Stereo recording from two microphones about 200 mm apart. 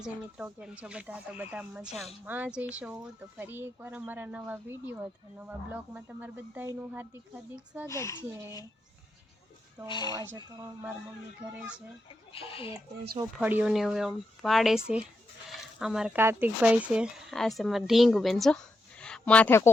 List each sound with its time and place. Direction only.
0.0 s speech: 5° right (ahead or behind)
7.9 s speech: 15° left (ahead or behind)
9.9 s speech: 20° left (ahead or behind)
10.3 s speech: 15° right (ahead or behind)
12.3 s speech: 30° left (ahead or behind)
13.4 s speech: 10° right (ahead or behind); by 19.7 s 10° left (ahead or behind)